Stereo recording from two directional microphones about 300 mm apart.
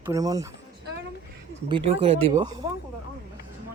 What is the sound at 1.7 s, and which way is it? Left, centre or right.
Speech, centre.